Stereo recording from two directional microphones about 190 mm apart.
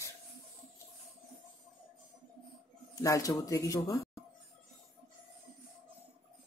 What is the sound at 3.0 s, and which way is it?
Speech, 15° left (ahead or behind).